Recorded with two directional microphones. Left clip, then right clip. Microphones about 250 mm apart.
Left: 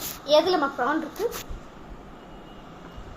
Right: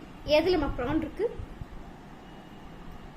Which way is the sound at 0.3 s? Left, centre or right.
Centre.